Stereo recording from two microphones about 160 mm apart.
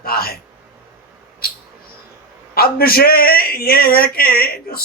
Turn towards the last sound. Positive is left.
turn(degrees=70)  # may be behind; listen again after turning